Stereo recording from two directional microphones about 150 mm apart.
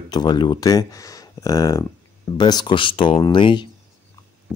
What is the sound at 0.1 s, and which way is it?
Speech, 30° left (ahead or behind).